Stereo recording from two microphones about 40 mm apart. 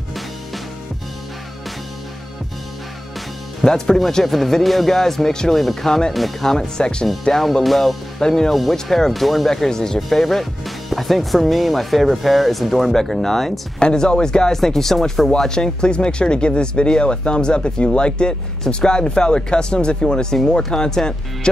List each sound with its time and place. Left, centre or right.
3.6 s speech: centre
5.5 s speech: centre
7.3 s speech: centre
9.5 s speech: centre
13.7 s speech: centre